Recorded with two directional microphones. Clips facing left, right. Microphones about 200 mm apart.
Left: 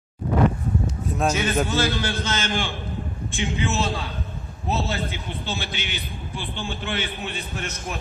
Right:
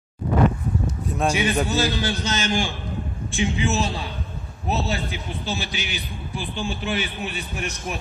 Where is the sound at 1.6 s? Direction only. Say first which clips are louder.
Right 1 dB; 15° right (ahead or behind).